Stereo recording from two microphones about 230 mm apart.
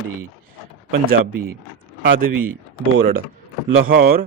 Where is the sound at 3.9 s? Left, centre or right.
Right.